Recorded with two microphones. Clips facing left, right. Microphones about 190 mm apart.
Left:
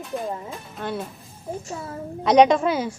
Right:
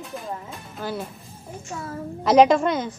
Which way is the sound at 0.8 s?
Centre (ahead or behind).